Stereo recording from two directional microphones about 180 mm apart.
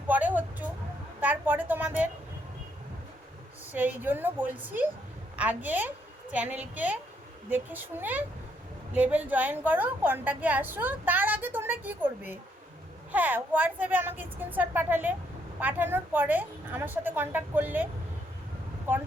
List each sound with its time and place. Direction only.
0.1 s a sound: 10° right (ahead or behind)
3.7 s a woman's voice: 10° right (ahead or behind)
18.9 s a woman's voice: 10° right (ahead or behind)